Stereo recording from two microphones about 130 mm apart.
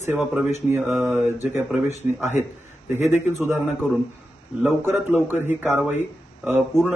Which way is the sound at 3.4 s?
15° right (ahead or behind).